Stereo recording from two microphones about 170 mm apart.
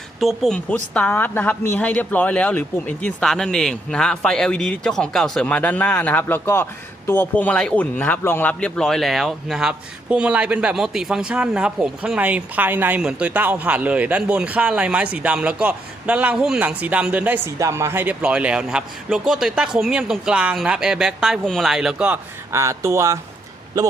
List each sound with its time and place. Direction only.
0.2 s a man's voice: centre (ahead or behind)
22.5 s a man's voice: 15° right (ahead or behind)